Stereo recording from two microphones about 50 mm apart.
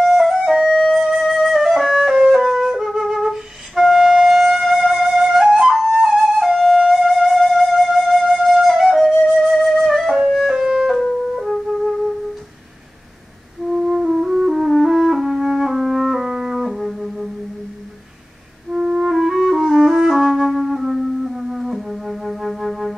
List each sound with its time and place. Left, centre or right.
0.0 s flute: centre
10.2 s music: centre
11.3 s flute: centre
13.8 s music: centre
18.8 s music: centre